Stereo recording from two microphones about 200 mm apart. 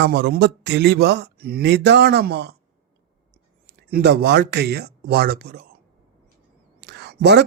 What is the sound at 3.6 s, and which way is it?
Speech, 55° right (ahead or behind).